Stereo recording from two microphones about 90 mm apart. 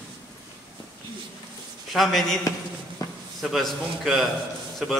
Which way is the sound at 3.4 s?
Centre (ahead or behind).